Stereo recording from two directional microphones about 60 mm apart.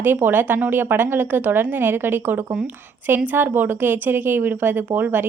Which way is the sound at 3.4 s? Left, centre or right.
Right.